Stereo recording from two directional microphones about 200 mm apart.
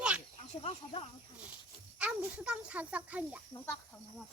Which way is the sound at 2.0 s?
5° right (ahead or behind).